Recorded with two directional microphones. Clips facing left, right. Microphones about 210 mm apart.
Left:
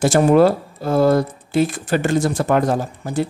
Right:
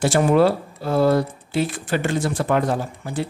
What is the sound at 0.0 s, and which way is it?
Speech, 45° left (ahead or behind).